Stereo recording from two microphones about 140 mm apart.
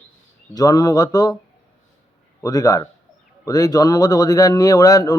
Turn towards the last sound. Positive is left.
turn(degrees=25)  # may be behind; listen again after turning